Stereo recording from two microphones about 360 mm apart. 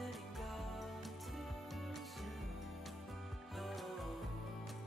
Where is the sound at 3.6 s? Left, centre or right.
Centre.